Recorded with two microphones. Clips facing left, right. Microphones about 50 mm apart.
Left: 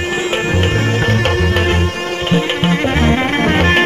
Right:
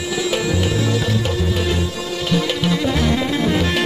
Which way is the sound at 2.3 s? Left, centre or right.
Left.